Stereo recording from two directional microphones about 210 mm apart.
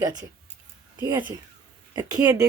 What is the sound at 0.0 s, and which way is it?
Speech, 15° right (ahead or behind).